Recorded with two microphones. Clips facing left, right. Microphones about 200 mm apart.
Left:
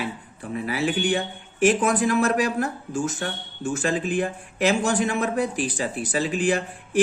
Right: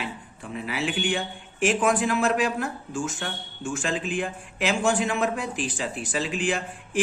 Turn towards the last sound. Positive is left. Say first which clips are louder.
# left 5 dB
turn(degrees=40)  # may be behind; listen again after turning